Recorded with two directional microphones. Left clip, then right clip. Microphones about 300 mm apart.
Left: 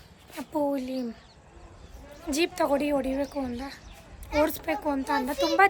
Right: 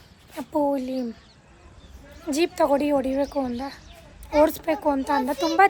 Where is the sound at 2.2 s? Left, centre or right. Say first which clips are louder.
Right 4 dB; centre.